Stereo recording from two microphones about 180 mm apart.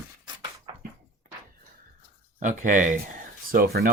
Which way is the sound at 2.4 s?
45° right (ahead or behind).